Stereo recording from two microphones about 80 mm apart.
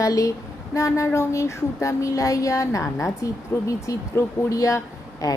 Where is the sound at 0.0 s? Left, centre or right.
Left.